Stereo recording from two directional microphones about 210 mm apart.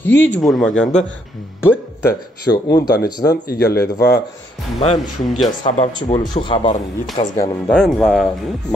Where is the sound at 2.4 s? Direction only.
20° left (ahead or behind).